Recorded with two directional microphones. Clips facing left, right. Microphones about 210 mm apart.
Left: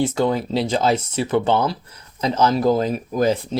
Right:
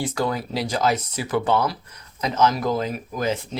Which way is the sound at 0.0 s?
25° left (ahead or behind).